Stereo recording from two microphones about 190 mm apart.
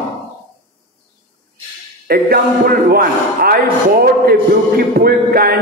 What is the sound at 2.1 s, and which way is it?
A man's voice, 50° right (ahead or behind).